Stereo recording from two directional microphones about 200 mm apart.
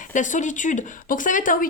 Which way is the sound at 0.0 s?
40° left (ahead or behind).